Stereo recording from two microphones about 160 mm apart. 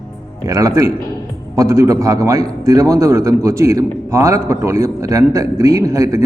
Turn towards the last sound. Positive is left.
turn(degrees=-20)  # may be behind; listen again after turning